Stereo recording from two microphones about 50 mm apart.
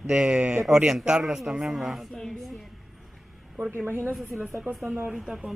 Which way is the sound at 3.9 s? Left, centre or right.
Right.